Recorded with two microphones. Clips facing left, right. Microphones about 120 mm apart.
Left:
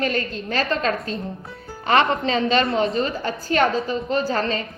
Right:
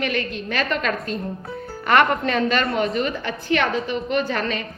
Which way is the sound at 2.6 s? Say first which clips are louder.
Left 1 dB; 25° left (ahead or behind).